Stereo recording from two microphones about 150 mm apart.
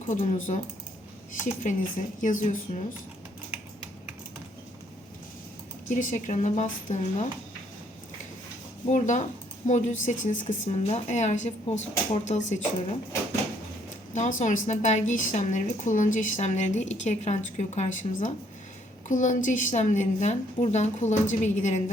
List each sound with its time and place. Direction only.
0.0 s speech: 55° left (ahead or behind)
2.2 s speech: 60° left (ahead or behind)
5.9 s speech: 60° left (ahead or behind)
8.9 s a woman's voice: 55° left (ahead or behind)
14.1 s a woman's voice: 55° left (ahead or behind)